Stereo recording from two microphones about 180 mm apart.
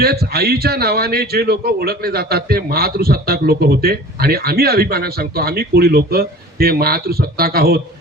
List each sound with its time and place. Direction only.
0.0 s a man's voice: 60° right (ahead or behind)